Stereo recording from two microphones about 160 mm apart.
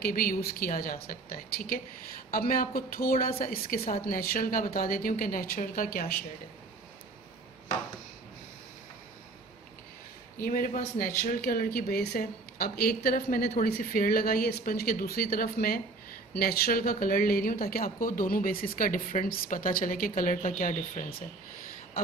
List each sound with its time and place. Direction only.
0.0 s speech: 65° left (ahead or behind)
10.4 s speech: 60° left (ahead or behind)